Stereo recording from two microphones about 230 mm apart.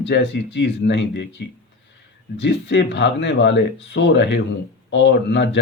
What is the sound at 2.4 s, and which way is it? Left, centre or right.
Speech, left.